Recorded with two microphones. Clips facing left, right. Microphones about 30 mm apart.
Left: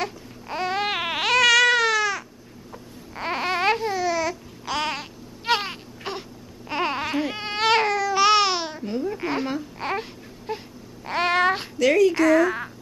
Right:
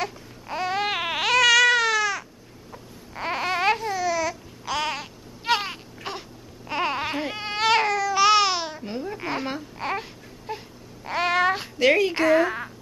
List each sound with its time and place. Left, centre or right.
0.0 s babbling: centre
7.1 s baby cry: centre
7.3 s baby cry: centre
8.8 s babbling: centre
11.8 s a sound: right